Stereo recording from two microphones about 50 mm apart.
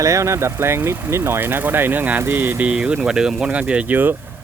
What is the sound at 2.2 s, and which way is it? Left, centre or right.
Speech, right.